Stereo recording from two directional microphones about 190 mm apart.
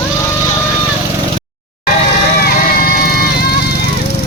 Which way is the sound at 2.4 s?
50° left (ahead or behind).